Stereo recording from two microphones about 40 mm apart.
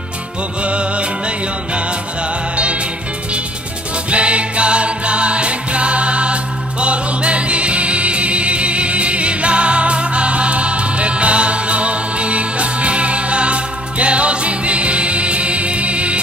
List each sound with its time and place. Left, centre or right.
0.6 s music: right
4.1 s music: right